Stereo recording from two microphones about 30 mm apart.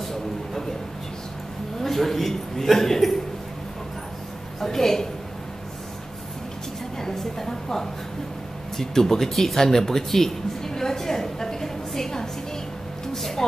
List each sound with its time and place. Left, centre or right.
1.8 s a man's voice: centre
4.6 s a man's voice: centre
7.0 s a sound: centre
8.7 s music: centre